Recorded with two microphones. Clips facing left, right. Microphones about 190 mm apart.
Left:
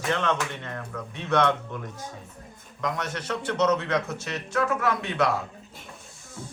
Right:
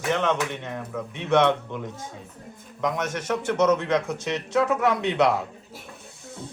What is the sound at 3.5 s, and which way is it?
A man's voice, 10° right (ahead or behind).